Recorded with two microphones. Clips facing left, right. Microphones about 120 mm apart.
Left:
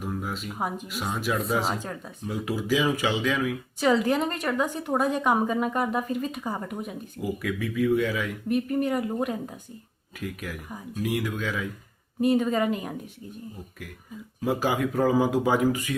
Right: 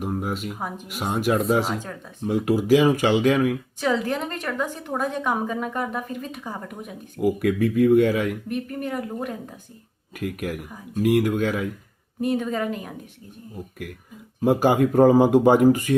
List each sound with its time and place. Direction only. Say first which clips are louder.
0.2 s a sound: right 5 dB; 55° right (ahead or behind)
0.9 s speech: right 7 dB; 55° right (ahead or behind)
1.6 s a woman's voice: right 1 dB; centre (ahead or behind)
2.2 s speech: right 8 dB; 55° right (ahead or behind)
3.8 s a woman's voice: left 4 dB; 5° left (ahead or behind)
7.2 s speech: right 9 dB; 55° right (ahead or behind)
8.4 s a woman's voice: left 4 dB; 5° left (ahead or behind)
10.2 s speech: right 6 dB; 55° right (ahead or behind)
12.2 s a woman's voice: left 2 dB; centre (ahead or behind)
14.4 s speech: right 7 dB; 55° right (ahead or behind)